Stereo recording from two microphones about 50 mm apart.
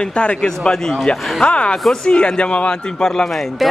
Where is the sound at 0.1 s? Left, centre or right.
Left.